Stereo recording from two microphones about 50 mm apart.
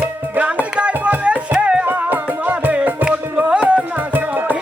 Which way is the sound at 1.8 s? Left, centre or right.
Right.